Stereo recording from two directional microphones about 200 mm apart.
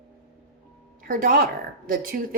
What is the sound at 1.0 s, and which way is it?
A woman's voice, 45° right (ahead or behind).